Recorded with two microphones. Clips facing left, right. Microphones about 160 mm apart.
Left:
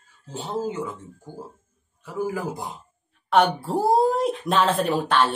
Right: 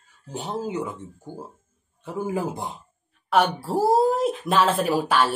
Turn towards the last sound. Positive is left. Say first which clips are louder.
# even
turn(degrees=-5)  # may be behind; listen again after turning